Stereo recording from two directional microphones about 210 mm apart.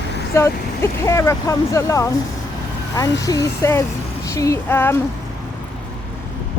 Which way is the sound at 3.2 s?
15° left (ahead or behind).